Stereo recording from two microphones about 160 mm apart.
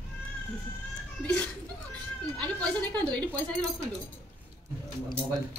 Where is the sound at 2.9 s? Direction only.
10° left (ahead or behind).